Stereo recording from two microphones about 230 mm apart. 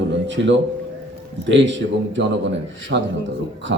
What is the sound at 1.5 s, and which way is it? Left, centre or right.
A man's voice, right.